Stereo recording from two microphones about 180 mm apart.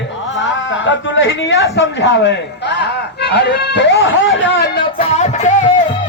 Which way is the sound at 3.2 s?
70° left (ahead or behind).